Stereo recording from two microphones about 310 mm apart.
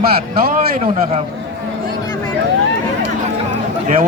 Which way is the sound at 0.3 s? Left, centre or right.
Right.